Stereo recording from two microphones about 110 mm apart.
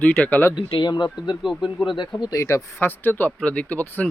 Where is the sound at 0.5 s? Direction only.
45° left (ahead or behind).